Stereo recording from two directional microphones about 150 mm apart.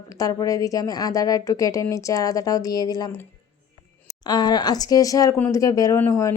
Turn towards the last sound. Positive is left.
turn(degrees=20)  # may be behind; listen again after turning